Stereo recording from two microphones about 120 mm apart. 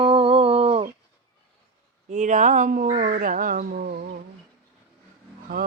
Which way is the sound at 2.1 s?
90° right.